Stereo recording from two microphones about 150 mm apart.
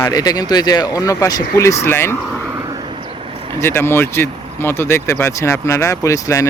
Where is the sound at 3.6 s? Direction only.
15° left (ahead or behind).